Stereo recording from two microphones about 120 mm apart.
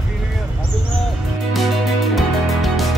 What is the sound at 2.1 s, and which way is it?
Music, centre (ahead or behind).